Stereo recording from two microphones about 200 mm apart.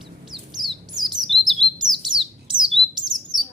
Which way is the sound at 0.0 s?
Centre (ahead or behind).